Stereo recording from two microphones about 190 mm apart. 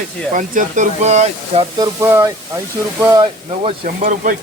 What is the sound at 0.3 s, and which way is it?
Speech, 40° right (ahead or behind).